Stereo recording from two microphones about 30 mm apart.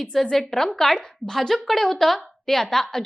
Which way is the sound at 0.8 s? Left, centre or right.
Centre.